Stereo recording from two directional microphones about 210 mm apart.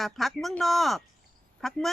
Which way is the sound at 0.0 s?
Centre (ahead or behind).